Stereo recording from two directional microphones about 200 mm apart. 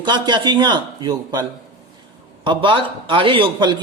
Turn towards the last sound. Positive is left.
turn(degrees=-20)  # may be behind; listen again after turning